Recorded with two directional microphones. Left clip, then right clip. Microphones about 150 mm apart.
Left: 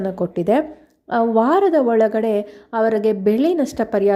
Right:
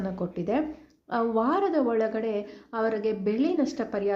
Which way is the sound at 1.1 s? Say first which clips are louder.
Left 9 dB; 50° left (ahead or behind).